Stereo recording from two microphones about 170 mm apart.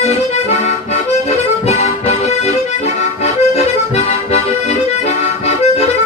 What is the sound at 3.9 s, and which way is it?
Music, 40° left (ahead or behind).